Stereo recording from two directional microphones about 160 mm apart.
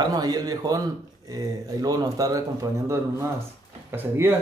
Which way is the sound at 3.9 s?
15° right (ahead or behind).